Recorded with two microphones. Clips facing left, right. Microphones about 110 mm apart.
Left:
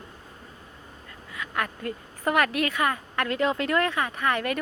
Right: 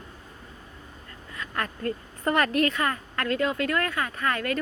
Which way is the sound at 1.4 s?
10° left (ahead or behind).